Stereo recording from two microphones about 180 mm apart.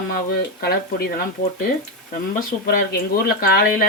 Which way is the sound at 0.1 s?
60° left (ahead or behind).